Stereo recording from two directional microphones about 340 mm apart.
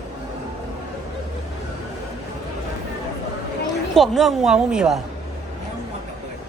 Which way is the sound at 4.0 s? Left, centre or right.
Centre.